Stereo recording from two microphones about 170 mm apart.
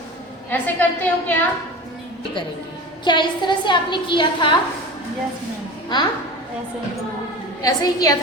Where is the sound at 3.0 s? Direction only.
25° left (ahead or behind).